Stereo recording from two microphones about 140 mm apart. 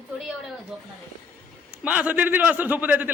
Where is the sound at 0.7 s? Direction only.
5° right (ahead or behind).